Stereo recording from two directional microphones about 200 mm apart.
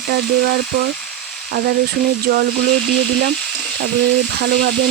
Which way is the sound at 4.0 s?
55° right (ahead or behind).